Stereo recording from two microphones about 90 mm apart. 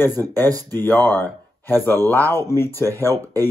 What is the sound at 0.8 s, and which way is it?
Speech, 25° left (ahead or behind).